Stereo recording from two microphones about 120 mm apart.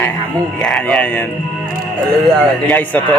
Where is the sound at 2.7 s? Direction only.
15° left (ahead or behind).